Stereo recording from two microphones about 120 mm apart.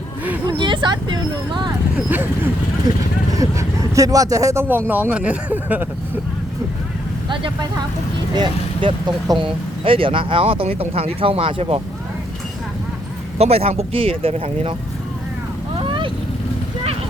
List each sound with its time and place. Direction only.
0.4 s speech: 40° right (ahead or behind)
2.9 s speech: 30° right (ahead or behind)
4.9 s speech: 15° right (ahead or behind)
8.3 s speech: 40° right (ahead or behind)
9.8 s speech: 50° right (ahead or behind)
13.4 s speech: 55° right (ahead or behind)
15.8 s vehicle: 45° right (ahead or behind)